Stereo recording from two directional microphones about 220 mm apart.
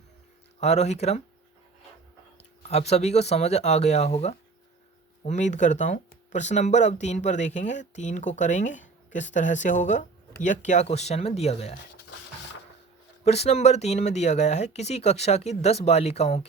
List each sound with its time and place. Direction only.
0.6 s speech: 30° left (ahead or behind)
2.4 s speech: 30° left (ahead or behind)
13.2 s speech: 30° left (ahead or behind)